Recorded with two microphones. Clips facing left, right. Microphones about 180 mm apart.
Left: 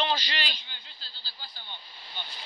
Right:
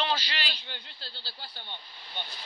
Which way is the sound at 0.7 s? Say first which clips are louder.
Right 7 dB; 65° right (ahead or behind).